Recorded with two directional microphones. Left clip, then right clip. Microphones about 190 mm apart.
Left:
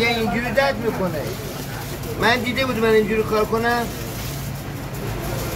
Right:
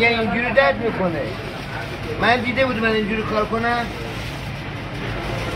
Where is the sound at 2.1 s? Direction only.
15° left (ahead or behind).